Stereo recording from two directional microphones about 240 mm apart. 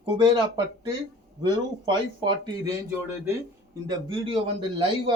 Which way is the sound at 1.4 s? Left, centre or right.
Centre.